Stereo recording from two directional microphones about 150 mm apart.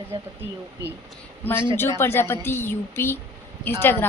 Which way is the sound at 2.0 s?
15° left (ahead or behind).